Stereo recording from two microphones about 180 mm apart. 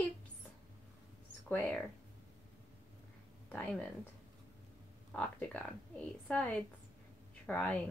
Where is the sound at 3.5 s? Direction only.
5° left (ahead or behind).